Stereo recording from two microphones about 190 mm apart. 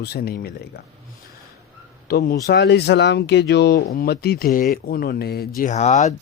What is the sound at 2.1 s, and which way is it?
Speech, 55° left (ahead or behind).